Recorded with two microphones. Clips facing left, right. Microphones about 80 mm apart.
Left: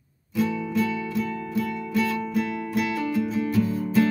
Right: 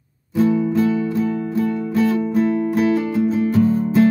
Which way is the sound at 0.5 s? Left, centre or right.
Right.